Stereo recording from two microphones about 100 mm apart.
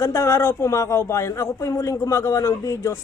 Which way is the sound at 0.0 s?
30° left (ahead or behind).